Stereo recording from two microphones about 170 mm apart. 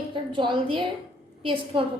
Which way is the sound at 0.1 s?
30° right (ahead or behind).